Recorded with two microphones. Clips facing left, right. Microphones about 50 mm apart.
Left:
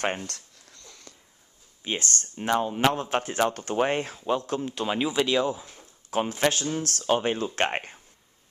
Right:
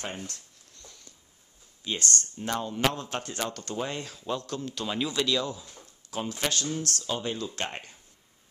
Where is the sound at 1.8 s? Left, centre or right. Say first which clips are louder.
Left 1 dB; left.